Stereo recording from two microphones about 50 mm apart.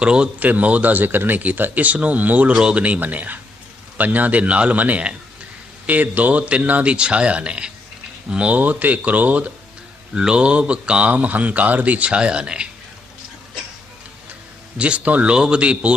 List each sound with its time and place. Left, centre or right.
0.0 s a man's voice: right
0.4 s a man's voice: right
6.9 s a man's voice: right
10.2 s a man's voice: centre
11.1 s speech: right
14.8 s a man's voice: right